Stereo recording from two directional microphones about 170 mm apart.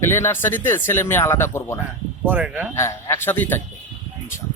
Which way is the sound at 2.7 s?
15° left (ahead or behind).